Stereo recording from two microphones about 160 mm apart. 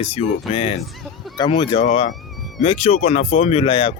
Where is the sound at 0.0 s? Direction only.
40° left (ahead or behind).